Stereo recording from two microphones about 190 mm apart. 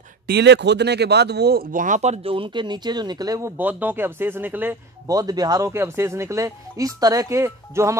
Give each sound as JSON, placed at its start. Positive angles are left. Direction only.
{"t": 0.3, "sound": "speech", "side_deg": -65}